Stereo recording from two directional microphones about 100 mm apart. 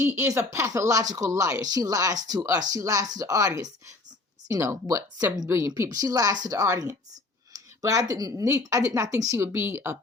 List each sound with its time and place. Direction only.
0.0 s speech: 25° right (ahead or behind)